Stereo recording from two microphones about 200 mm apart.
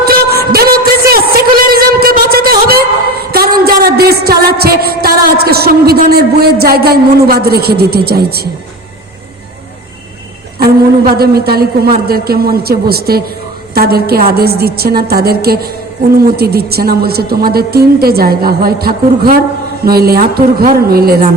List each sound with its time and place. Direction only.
0.0 s music: 50° right (ahead or behind)
1.4 s a sound: 50° right (ahead or behind)
3.6 s music: 50° right (ahead or behind)
10.6 s a woman's voice: 50° right (ahead or behind)